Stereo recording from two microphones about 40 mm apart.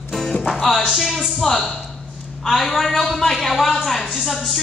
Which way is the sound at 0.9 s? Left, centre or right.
Centre.